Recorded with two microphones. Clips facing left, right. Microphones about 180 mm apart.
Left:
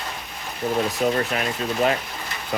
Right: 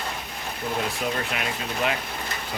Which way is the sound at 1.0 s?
40° left (ahead or behind).